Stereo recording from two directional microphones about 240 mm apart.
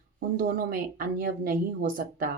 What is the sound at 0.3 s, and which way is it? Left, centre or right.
Speech, right.